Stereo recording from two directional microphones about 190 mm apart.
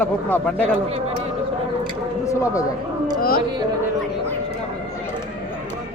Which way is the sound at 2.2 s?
15° left (ahead or behind).